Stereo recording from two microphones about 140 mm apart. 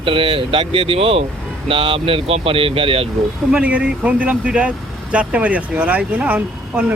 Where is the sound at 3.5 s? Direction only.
10° right (ahead or behind).